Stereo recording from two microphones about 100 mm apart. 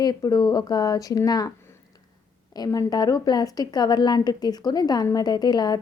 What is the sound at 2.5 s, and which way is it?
Speech, 40° left (ahead or behind).